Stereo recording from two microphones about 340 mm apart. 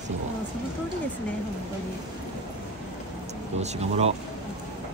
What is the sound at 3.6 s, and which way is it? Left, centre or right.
Speech, centre.